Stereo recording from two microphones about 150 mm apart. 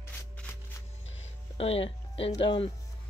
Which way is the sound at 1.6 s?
40° left (ahead or behind).